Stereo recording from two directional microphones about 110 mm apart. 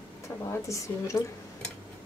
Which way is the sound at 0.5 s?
25° left (ahead or behind).